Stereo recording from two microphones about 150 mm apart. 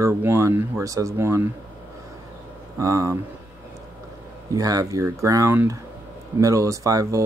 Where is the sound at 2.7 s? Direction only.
20° right (ahead or behind).